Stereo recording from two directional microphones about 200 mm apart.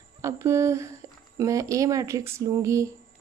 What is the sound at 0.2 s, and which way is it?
A woman's voice, 15° right (ahead or behind).